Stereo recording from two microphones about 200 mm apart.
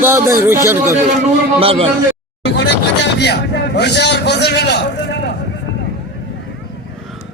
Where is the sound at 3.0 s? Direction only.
55° left (ahead or behind).